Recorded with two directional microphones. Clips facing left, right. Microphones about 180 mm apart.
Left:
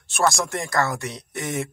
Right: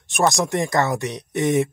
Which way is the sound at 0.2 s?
20° right (ahead or behind).